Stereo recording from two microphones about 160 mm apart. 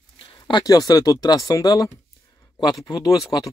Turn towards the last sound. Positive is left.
turn(degrees=25)  # may be behind; listen again after turning